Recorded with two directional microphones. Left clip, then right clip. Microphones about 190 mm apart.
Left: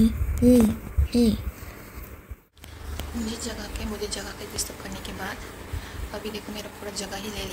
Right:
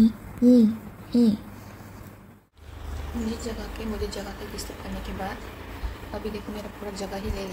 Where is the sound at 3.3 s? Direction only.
Centre (ahead or behind).